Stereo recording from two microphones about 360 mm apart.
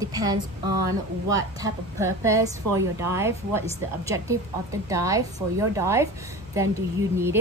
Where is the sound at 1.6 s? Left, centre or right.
Centre.